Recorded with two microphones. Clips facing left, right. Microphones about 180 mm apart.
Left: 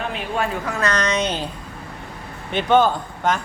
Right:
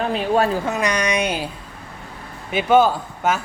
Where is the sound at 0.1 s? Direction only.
35° right (ahead or behind).